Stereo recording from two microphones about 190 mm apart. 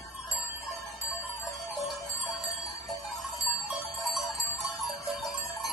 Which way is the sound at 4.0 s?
Centre (ahead or behind).